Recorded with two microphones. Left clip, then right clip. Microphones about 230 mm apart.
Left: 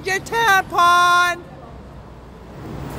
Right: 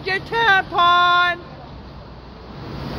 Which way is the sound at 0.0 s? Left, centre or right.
Left.